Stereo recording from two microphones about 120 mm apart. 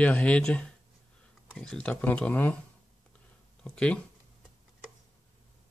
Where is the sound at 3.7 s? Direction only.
10° left (ahead or behind).